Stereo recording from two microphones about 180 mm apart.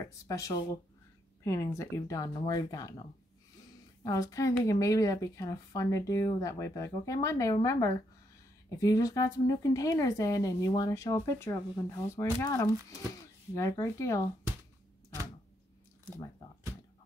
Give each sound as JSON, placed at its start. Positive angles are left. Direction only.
{"t": 0.0, "sound": "a woman's voice", "side_deg": 20}